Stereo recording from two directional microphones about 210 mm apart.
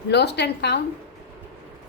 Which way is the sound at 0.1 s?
50° left (ahead or behind).